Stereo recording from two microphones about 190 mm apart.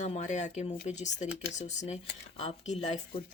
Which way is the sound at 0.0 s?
40° left (ahead or behind).